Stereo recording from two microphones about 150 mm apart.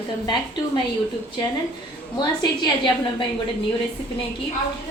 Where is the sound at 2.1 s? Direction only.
30° left (ahead or behind).